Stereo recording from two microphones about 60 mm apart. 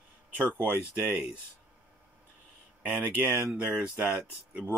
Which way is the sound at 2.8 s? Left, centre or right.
Right.